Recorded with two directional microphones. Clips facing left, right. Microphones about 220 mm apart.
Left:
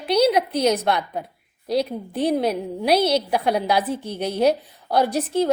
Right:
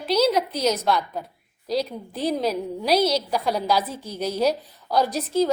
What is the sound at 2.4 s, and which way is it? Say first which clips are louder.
A woman's voice: left 2 dB; 60° left (ahead or behind).